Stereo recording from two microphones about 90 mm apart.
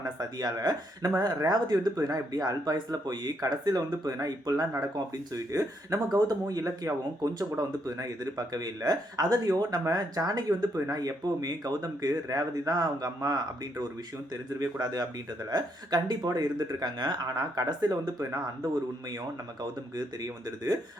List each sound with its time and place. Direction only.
0.0 s speech: 45° right (ahead or behind)
18.2 s speech: 35° right (ahead or behind)